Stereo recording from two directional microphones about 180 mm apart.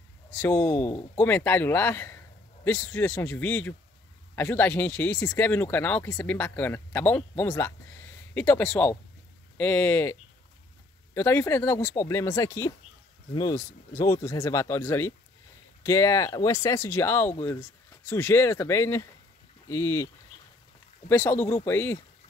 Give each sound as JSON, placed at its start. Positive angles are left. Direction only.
{"t": 0.4, "sound": "speech", "side_deg": 10}
{"t": 11.1, "sound": "speech", "side_deg": 15}
{"t": 21.1, "sound": "speech", "side_deg": 15}